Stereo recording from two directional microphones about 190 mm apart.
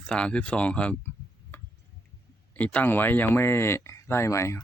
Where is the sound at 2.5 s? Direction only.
10° left (ahead or behind).